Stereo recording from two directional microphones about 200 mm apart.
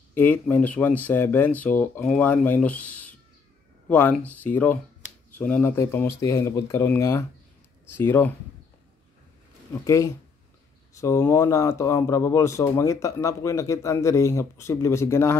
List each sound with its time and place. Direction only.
0.1 s speech: 10° left (ahead or behind)
9.8 s speech: 15° left (ahead or behind)